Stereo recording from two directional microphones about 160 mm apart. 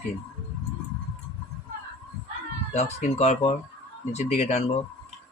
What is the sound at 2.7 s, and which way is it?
Speech, 45° left (ahead or behind).